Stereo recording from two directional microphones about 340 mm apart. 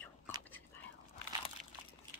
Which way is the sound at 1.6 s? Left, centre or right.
Right.